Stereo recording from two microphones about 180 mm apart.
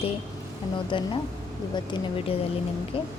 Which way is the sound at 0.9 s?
30° left (ahead or behind).